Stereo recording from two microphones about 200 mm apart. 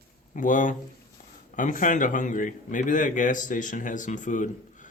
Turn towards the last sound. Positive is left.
turn(degrees=40)  # may be behind; listen again after turning